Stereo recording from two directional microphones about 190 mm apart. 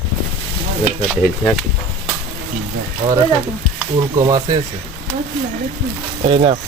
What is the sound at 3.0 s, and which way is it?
Speech, 40° right (ahead or behind).